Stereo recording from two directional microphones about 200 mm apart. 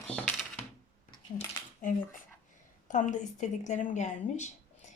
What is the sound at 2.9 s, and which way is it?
Speech, 40° left (ahead or behind).